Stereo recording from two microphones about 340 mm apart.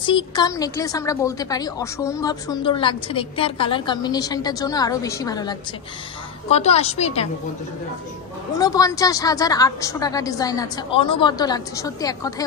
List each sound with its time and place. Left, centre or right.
0.0 s a woman's voice: centre
8.5 s a woman's voice: centre